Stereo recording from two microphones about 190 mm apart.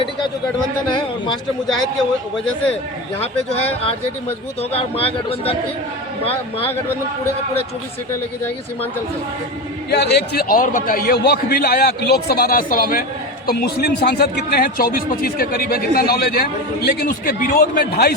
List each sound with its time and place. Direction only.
3.2 s a man's voice: 30° left (ahead or behind)
9.9 s speech: 60° left (ahead or behind)